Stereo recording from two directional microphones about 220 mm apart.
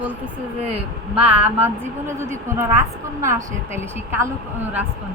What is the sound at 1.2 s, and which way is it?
A woman's voice, 10° right (ahead or behind).